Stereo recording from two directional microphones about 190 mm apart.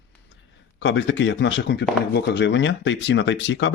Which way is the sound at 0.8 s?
75° left (ahead or behind).